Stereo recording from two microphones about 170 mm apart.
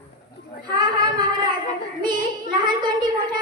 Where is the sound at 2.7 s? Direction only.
25° right (ahead or behind).